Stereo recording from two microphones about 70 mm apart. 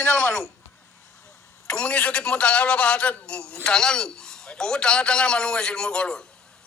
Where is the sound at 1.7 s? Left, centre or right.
Centre.